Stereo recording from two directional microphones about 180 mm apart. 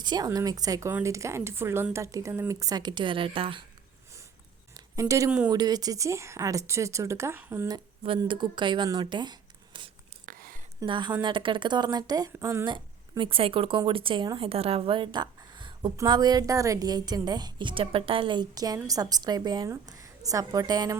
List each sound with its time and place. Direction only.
0.0 s a woman's voice: 25° right (ahead or behind)
4.7 s a sound: 20° right (ahead or behind)
5.5 s a woman's voice: 20° right (ahead or behind)
8.0 s speech: 30° right (ahead or behind)
10.2 s a sound: 50° right (ahead or behind)
10.8 s a woman's voice: 25° right (ahead or behind)